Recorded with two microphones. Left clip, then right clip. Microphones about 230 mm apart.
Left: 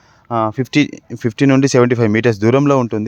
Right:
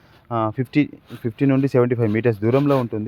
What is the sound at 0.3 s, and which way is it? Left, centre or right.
Speech, left.